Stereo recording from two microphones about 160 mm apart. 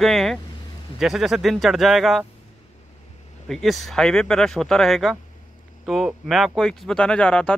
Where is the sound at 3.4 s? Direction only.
Centre (ahead or behind).